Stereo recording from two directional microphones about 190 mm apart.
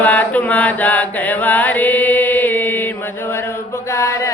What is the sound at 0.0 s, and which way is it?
Chant, 10° left (ahead or behind).